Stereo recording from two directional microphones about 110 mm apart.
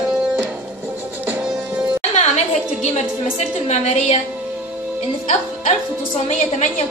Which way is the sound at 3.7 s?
90° left.